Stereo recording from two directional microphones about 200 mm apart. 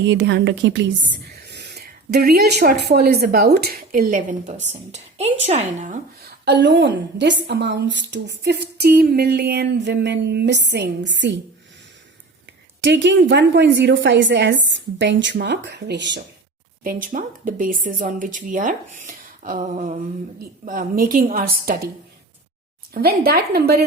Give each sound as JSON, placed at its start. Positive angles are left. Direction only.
{"t": 0.0, "sound": "a woman's voice", "side_deg": -65}
{"t": 6.4, "sound": "a woman's voice", "side_deg": -60}
{"t": 12.8, "sound": "a woman's voice", "side_deg": -65}
{"t": 16.8, "sound": "speech", "side_deg": -40}
{"t": 23.0, "sound": "speech", "side_deg": -50}